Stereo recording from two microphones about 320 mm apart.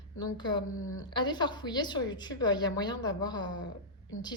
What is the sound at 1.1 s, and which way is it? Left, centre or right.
A woman's voice, centre.